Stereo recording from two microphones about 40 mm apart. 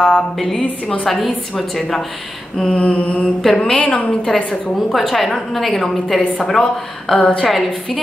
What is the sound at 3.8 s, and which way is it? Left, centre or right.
Speech, left.